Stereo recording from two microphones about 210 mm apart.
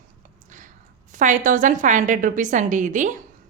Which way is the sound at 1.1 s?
35° right (ahead or behind).